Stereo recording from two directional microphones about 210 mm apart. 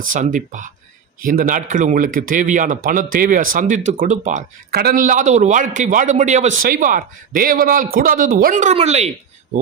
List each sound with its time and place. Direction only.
0.0 s speech: 40° right (ahead or behind)